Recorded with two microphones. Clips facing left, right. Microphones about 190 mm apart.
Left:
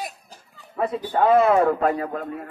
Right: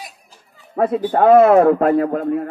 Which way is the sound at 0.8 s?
55° right (ahead or behind).